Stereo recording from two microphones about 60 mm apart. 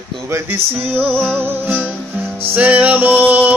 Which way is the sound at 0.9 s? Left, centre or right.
Right.